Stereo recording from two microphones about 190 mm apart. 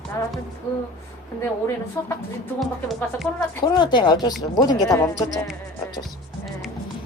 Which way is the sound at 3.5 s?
25° left (ahead or behind).